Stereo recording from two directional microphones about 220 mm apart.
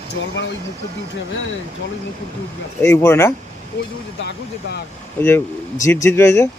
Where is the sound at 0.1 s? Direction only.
55° left (ahead or behind).